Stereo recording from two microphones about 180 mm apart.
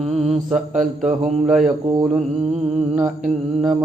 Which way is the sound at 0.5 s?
45° right (ahead or behind).